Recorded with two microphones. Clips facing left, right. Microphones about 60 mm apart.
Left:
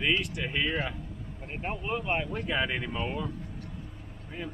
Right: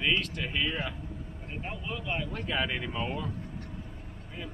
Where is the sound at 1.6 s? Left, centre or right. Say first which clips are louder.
Left 6 dB; left.